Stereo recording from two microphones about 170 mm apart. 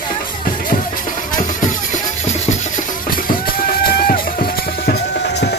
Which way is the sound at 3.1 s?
55° left (ahead or behind).